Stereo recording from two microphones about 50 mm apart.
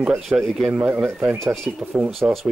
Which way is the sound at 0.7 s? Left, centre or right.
Right.